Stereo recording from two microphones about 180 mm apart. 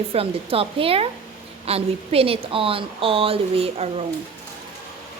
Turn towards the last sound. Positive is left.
turn(degrees=-35)  # may be behind; listen again after turning